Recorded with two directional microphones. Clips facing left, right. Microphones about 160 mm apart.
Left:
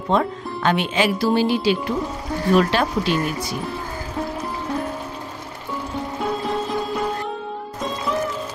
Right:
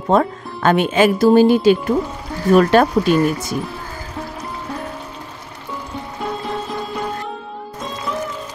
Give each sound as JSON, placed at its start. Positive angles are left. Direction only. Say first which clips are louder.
{"t": 0.1, "sound": "speech", "louder": "right 4 dB", "side_deg": -50}
{"t": 6.1, "sound": "music", "louder": "left 1 dB", "side_deg": 0}